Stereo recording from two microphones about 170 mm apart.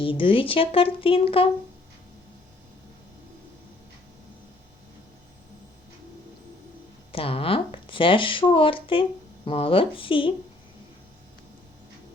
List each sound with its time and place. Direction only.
0.0 s speech: 30° left (ahead or behind)
7.1 s speech: 35° left (ahead or behind)